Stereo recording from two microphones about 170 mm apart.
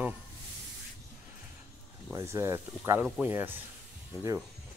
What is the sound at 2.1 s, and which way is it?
Speech, 15° right (ahead or behind).